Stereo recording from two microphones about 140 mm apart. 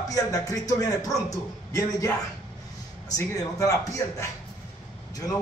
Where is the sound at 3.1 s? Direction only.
25° left (ahead or behind).